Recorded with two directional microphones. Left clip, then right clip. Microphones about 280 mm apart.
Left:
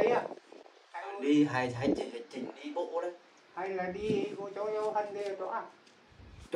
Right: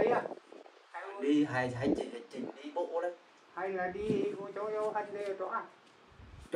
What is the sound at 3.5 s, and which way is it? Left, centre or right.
Speech, centre.